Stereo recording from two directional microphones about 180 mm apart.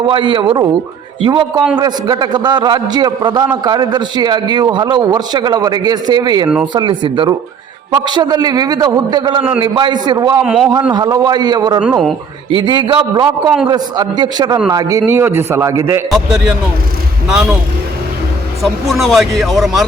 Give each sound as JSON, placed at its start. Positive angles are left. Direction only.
{"t": 0.1, "sound": "a man's voice", "side_deg": -25}
{"t": 10.4, "sound": "speech", "side_deg": -5}
{"t": 10.9, "sound": "a man's voice", "side_deg": -20}
{"t": 11.8, "sound": "speech", "side_deg": 0}
{"t": 12.5, "sound": "a man's voice", "side_deg": -25}
{"t": 17.2, "sound": "speech", "side_deg": -5}
{"t": 18.6, "sound": "speech", "side_deg": 0}